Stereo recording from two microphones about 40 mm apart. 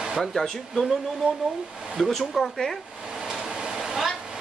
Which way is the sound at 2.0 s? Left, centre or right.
Centre.